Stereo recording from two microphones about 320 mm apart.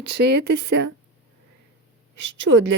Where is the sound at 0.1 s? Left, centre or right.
Right.